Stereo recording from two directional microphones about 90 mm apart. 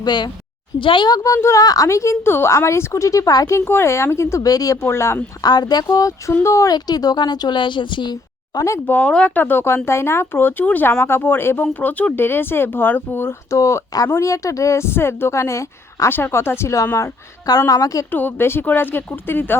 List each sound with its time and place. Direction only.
0.0 s a woman's voice: 55° left (ahead or behind)
0.8 s speech: 65° left (ahead or behind)
1.0 s speech: 40° left (ahead or behind)
3.7 s speech: 30° left (ahead or behind)
5.4 s speech: 50° left (ahead or behind)
6.7 s speech: 45° left (ahead or behind)
8.5 s speech: 35° left (ahead or behind)
8.9 s speech: 15° left (ahead or behind); by 18.0 s 40° left (ahead or behind)
18.1 s speech: 20° left (ahead or behind)